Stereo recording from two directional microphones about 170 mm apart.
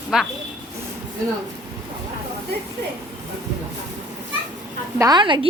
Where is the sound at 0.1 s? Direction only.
5° right (ahead or behind).